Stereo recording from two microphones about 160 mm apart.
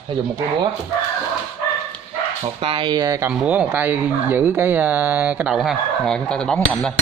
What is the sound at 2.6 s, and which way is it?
Speech, 30° right (ahead or behind).